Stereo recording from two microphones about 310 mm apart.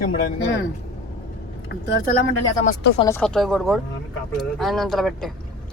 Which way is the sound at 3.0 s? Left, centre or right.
Centre.